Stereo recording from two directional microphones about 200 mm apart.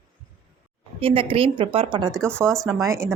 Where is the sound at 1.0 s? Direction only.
25° right (ahead or behind).